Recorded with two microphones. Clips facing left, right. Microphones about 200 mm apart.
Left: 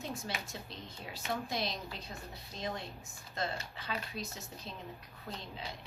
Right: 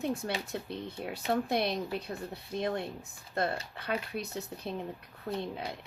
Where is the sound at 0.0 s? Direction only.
60° right (ahead or behind).